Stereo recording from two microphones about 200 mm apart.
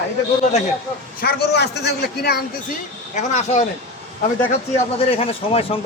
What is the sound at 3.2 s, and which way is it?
Speech, 35° left (ahead or behind).